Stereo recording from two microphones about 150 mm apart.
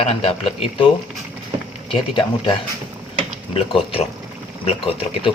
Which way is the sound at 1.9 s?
30° left (ahead or behind).